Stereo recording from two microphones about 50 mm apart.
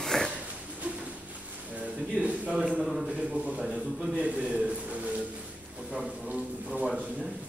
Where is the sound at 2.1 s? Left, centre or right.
Right.